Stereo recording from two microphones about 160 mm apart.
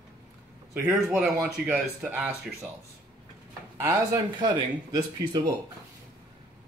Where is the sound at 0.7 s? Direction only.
15° right (ahead or behind).